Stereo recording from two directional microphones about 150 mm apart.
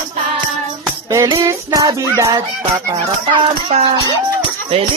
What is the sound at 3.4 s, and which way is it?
Speech, 35° right (ahead or behind).